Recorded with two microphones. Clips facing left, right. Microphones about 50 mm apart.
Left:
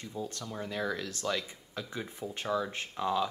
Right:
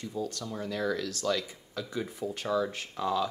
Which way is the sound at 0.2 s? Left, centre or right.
Left.